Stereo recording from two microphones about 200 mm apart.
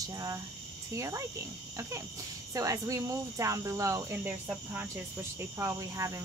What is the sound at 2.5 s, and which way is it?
Speech, 15° right (ahead or behind).